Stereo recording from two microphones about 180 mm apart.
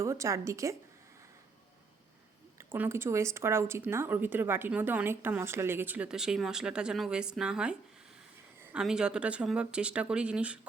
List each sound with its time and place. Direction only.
0.0 s speech: 15° right (ahead or behind)
2.6 s speech: 10° right (ahead or behind)